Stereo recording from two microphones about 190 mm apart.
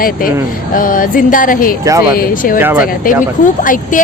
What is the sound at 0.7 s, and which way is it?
Speech, 45° left (ahead or behind).